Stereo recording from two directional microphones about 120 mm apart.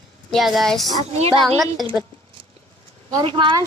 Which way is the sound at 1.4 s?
Centre (ahead or behind).